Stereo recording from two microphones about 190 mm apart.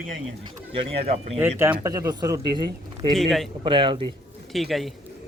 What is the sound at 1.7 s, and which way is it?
Speech, 20° right (ahead or behind).